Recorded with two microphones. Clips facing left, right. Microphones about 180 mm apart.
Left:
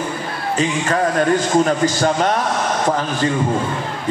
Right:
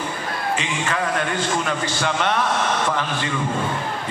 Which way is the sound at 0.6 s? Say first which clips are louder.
Left 6 dB; 40° left (ahead or behind).